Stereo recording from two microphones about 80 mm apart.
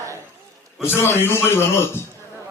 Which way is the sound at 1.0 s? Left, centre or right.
Left.